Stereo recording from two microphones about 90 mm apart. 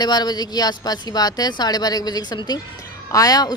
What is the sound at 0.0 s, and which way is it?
Speech, 50° left (ahead or behind).